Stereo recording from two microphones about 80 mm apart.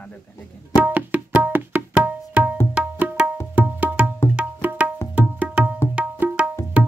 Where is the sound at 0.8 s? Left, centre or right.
Centre.